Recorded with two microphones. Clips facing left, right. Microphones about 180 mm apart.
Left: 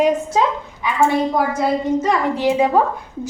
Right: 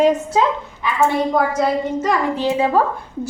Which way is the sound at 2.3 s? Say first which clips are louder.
Left 2 dB; 15° left (ahead or behind).